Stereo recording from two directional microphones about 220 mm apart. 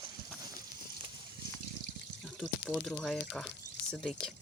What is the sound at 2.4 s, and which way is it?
Speech, 5° left (ahead or behind).